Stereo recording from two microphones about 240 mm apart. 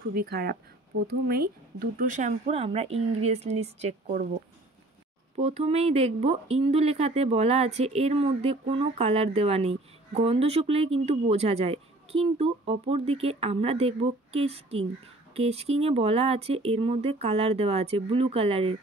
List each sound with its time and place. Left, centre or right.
0.0 s speech: right
5.4 s speech: right